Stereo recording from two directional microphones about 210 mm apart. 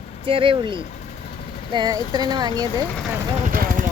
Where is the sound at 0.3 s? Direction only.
25° right (ahead or behind).